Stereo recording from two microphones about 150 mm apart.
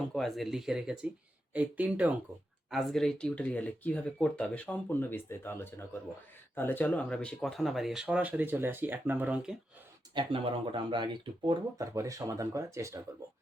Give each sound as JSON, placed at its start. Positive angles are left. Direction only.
{"t": 0.1, "sound": "speech", "side_deg": 0}
{"t": 10.2, "sound": "speech", "side_deg": -35}